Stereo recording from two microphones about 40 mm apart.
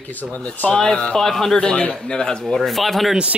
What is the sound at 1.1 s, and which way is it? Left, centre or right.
Speech, centre.